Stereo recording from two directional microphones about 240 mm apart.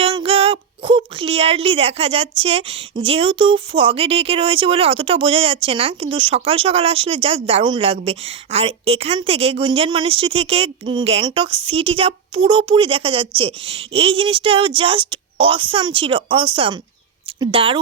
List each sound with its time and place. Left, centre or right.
0.0 s speech: right